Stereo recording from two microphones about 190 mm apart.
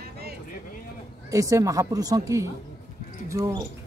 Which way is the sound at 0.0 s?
55° right (ahead or behind).